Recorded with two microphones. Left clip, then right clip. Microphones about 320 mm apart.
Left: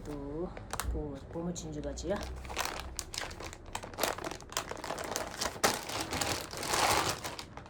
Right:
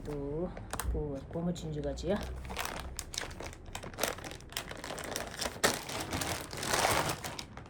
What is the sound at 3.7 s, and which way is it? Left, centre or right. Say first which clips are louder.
Crumpling: left 2 dB; centre.